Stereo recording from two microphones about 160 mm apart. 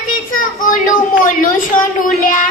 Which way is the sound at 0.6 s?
55° left (ahead or behind).